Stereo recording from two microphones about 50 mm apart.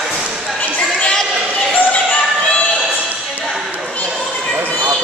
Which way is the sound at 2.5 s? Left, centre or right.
Left.